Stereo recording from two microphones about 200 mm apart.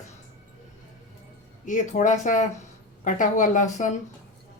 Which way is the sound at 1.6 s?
40° left (ahead or behind).